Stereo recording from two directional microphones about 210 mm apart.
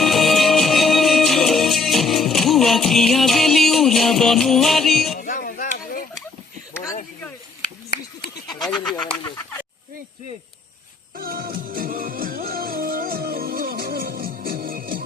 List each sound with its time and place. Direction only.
0.0 s music: centre (ahead or behind)
5.1 s a sound: 40° left (ahead or behind)
8.8 s speech: 5° left (ahead or behind)
11.2 s music: 45° right (ahead or behind)